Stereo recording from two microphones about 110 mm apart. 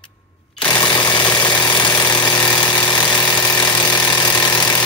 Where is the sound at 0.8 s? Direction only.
40° left (ahead or behind).